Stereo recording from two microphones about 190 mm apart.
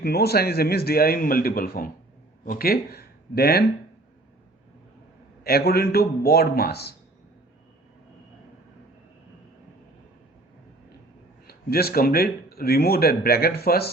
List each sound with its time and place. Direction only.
0.0 s speech: 55° left (ahead or behind)
5.4 s a man's voice: 55° left (ahead or behind)
11.4 s speech: 55° left (ahead or behind)